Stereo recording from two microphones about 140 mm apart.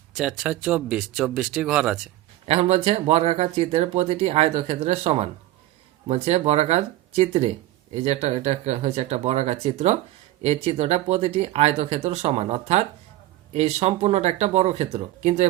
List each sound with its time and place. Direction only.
0.2 s speech: 5° right (ahead or behind)
2.5 s speech: 50° right (ahead or behind)